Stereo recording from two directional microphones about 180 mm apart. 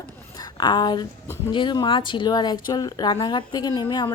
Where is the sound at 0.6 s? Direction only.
25° left (ahead or behind).